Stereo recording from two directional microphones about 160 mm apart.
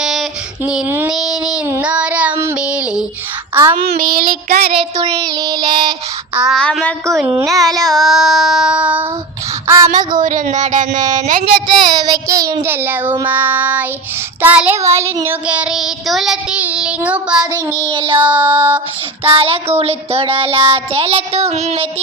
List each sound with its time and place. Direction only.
0.0 s child singing: 5° right (ahead or behind)
3.5 s a child's voice: 10° right (ahead or behind)
3.8 s child singing: 65° right (ahead or behind)
5.0 s child singing: 20° right (ahead or behind)
6.3 s child singing: 5° right (ahead or behind)
6.6 s child singing: 5° left (ahead or behind)
9.6 s child singing: 20° right (ahead or behind)
10.2 s speech: 55° right (ahead or behind)
11.9 s child singing: 25° right (ahead or behind); by 17.4 s 5° right (ahead or behind)
17.4 s child singing: 25° right (ahead or behind)
18.2 s child singing: 10° right (ahead or behind)
19.4 s child singing: 40° right (ahead or behind)